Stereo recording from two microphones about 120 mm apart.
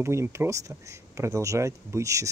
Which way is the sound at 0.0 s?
20° right (ahead or behind).